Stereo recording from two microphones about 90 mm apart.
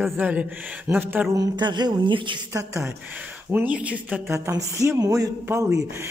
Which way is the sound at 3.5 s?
15° right (ahead or behind).